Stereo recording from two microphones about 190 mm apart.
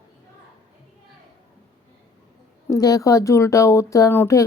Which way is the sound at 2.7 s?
20° left (ahead or behind).